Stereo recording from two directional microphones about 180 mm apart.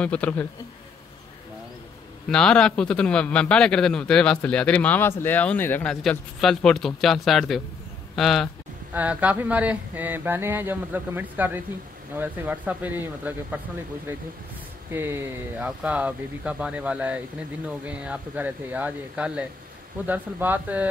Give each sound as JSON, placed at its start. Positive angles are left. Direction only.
{"t": 0.0, "sound": "a man's voice", "side_deg": 5}
{"t": 2.2, "sound": "a man's voice", "side_deg": 5}